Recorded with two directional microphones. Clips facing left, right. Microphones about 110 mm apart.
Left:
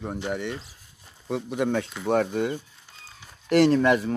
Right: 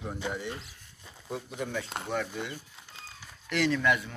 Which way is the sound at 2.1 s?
55° left (ahead or behind).